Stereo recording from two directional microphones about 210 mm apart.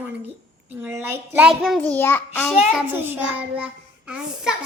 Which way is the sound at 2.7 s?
10° right (ahead or behind).